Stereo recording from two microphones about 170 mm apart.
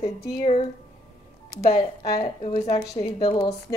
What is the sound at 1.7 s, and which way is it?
Speech, 30° left (ahead or behind).